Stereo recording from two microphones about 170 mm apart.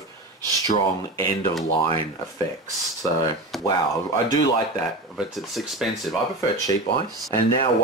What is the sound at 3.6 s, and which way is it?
Speech, 25° left (ahead or behind).